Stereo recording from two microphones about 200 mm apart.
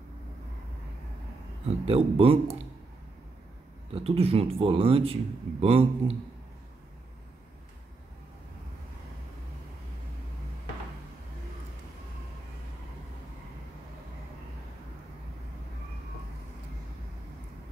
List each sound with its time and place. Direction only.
1.9 s speech: 30° right (ahead or behind)
3.9 s speech: 30° right (ahead or behind)